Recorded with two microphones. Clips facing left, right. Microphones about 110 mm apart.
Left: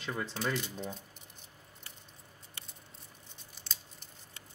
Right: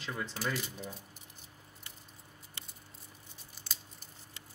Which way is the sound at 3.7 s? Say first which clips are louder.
Even; 5° right (ahead or behind).